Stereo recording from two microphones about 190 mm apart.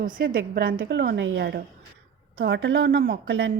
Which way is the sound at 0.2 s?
50° right (ahead or behind).